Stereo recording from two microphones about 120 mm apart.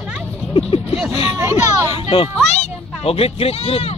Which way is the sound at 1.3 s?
25° right (ahead or behind).